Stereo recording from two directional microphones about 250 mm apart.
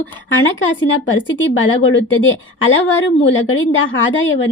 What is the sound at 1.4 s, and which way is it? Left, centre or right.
A woman's voice, left.